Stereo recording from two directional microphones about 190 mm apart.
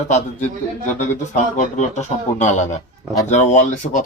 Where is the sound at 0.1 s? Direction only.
40° left (ahead or behind).